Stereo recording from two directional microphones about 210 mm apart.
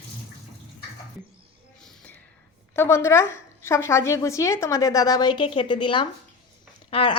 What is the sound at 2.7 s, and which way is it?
A woman's voice, 10° left (ahead or behind).